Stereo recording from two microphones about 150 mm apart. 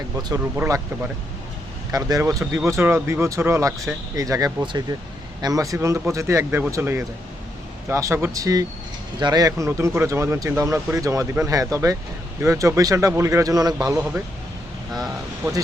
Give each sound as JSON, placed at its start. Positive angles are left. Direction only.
{"t": 0.5, "sound": "speech", "side_deg": -15}